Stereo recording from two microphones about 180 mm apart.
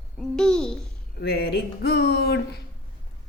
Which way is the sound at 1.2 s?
60° left (ahead or behind).